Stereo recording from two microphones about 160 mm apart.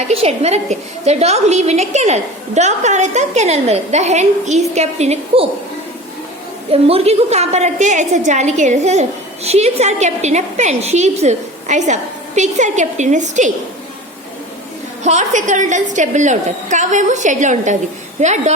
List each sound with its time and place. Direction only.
0.1 s a woman's voice: 40° right (ahead or behind)
6.7 s a woman's voice: 40° right (ahead or behind)
15.0 s a woman's voice: 50° right (ahead or behind)